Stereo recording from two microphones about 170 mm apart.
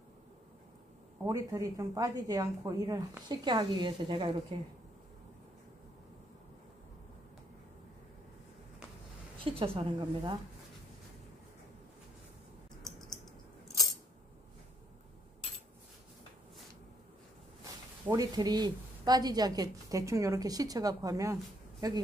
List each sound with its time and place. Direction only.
1.2 s a woman's voice: 20° right (ahead or behind)
9.4 s a woman's voice: 35° right (ahead or behind)
18.0 s a woman's voice: 20° right (ahead or behind)